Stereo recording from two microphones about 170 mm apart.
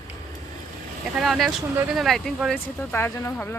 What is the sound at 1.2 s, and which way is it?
Speech, centre (ahead or behind).